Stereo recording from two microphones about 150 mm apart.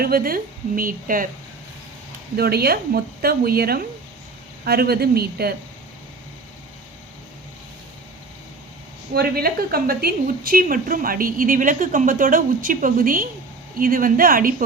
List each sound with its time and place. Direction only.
0.0 s a woman's voice: 75° right (ahead or behind)
2.3 s speech: 90° right
9.1 s a woman's voice: 90° right; by 14.5 s 70° right (ahead or behind)